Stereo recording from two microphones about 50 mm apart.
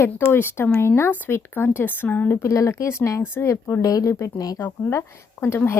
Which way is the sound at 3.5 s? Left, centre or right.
Left.